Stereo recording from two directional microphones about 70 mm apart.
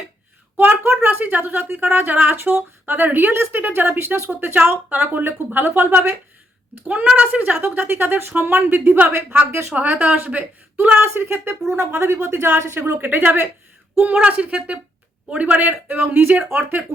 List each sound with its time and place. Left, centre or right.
0.9 s speech: right
9.7 s speech: right
11.0 s speech: right